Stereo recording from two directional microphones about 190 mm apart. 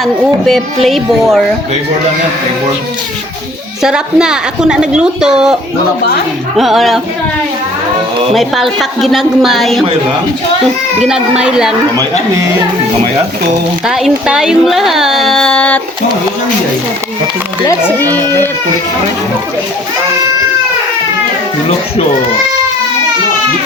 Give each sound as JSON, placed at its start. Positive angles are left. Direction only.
{"t": 0.0, "sound": "speech", "side_deg": 0}
{"t": 3.8, "sound": "speech", "side_deg": -5}
{"t": 6.6, "sound": "speech", "side_deg": 0}
{"t": 8.3, "sound": "speech", "side_deg": 0}
{"t": 11.1, "sound": "speech", "side_deg": -5}
{"t": 13.8, "sound": "speech", "side_deg": 0}
{"t": 17.7, "sound": "speech", "side_deg": 10}